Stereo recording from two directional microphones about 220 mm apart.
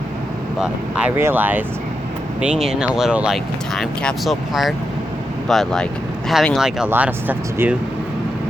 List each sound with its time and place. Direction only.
0.6 s speech: 5° right (ahead or behind)